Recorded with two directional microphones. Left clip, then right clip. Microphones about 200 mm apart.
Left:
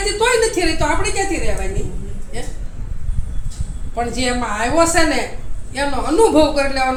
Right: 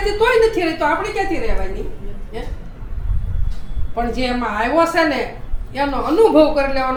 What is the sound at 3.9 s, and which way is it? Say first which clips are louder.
A woman's voice: even; 15° right (ahead or behind).